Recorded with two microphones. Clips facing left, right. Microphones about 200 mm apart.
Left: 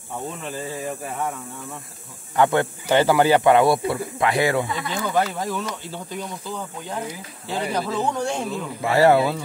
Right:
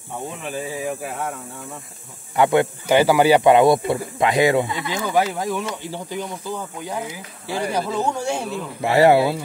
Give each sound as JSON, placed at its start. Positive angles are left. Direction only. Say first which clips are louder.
{"t": 0.4, "sound": "speech", "louder": "right 2 dB", "side_deg": -15}
{"t": 2.3, "sound": "speech", "louder": "right 2 dB", "side_deg": -15}
{"t": 8.8, "sound": "speech", "louder": "right 2 dB", "side_deg": -20}